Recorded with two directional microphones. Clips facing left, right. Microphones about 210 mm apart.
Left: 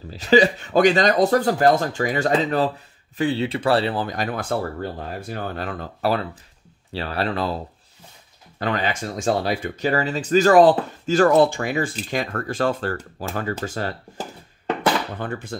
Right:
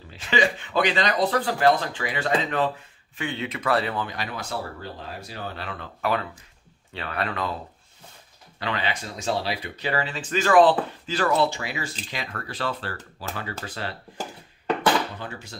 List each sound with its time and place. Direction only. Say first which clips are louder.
0.1 s speech: left 8 dB; 40° left (ahead or behind)
8.5 s speech: left 5 dB; 45° left (ahead or behind)
15.1 s speech: left 7 dB; 55° left (ahead or behind)